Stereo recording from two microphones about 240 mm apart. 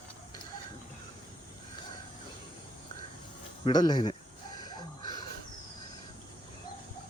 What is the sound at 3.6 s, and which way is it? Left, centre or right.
Speech, centre.